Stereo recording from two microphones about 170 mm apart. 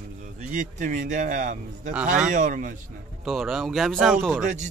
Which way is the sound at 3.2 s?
Centre (ahead or behind).